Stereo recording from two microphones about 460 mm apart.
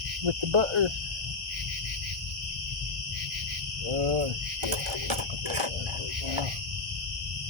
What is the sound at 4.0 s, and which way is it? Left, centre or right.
Owl, right.